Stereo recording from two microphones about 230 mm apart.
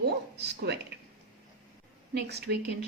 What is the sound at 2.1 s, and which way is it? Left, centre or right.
Speech, right.